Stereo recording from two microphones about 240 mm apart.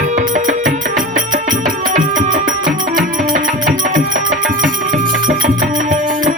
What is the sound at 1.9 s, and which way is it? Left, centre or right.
Music, right.